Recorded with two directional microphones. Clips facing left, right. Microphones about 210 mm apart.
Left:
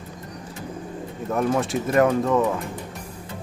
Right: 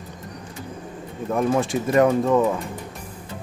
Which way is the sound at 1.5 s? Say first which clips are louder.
Right 2 dB; centre (ahead or behind).